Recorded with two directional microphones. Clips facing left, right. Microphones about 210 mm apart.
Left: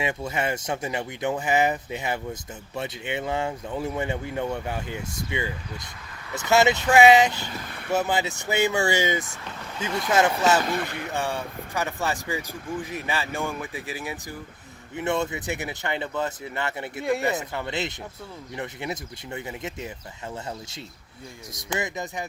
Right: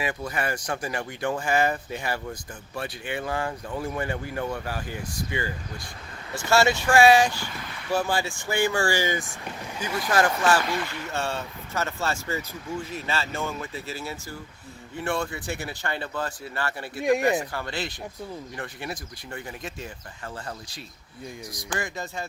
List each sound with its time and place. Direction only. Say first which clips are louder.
0.0 s speech: left 2 dB; 25° left (ahead or behind)
10.7 s speech: left 2 dB; 55° left (ahead or behind)
11.1 s speech: left 1 dB; 15° left (ahead or behind)
17.0 s speech: right 3 dB; 15° right (ahead or behind)
17.5 s speech: left 2 dB; 20° left (ahead or behind)
21.5 s speech: left 4 dB; 20° left (ahead or behind)